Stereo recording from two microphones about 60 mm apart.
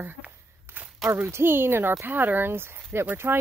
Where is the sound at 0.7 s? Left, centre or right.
Right.